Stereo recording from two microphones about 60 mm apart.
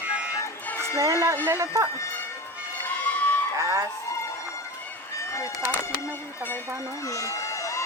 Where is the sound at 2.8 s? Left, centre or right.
Left.